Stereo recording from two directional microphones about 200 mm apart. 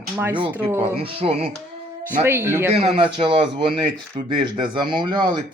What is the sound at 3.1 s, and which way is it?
Speech, 25° right (ahead or behind).